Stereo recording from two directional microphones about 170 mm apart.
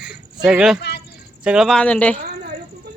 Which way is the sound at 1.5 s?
Centre (ahead or behind).